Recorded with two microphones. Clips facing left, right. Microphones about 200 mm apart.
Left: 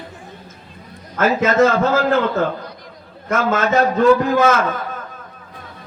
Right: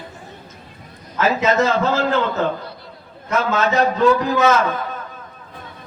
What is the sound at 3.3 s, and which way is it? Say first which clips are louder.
A man's voice: left 2 dB; 50° left (ahead or behind).